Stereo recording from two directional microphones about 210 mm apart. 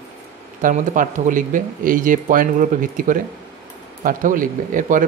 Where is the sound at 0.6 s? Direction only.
40° right (ahead or behind).